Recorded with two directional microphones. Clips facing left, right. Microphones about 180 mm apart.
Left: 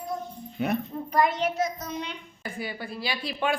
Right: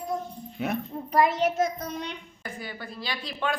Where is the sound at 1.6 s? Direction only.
55° right (ahead or behind).